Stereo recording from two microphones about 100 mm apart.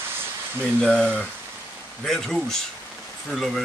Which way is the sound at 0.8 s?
10° left (ahead or behind).